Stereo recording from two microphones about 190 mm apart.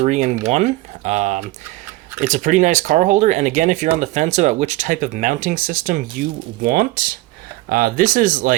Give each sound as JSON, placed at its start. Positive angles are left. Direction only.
{"t": 0.0, "sound": "speech", "side_deg": -40}